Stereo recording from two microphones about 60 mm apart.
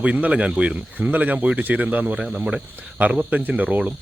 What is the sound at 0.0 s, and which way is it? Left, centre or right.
Speech, right.